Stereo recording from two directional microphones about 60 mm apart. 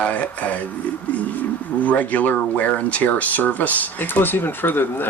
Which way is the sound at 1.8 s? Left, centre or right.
Left.